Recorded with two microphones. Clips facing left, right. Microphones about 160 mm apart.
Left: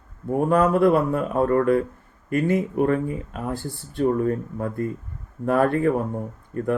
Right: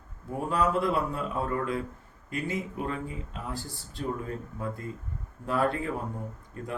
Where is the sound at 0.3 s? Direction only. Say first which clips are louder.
Left 9 dB; 55° left (ahead or behind).